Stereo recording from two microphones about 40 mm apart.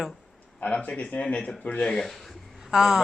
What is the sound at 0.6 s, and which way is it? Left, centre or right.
Speech, left.